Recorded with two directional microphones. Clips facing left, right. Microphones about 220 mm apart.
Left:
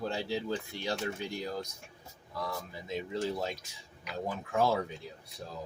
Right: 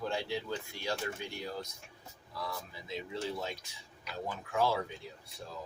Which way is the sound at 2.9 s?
45° left (ahead or behind).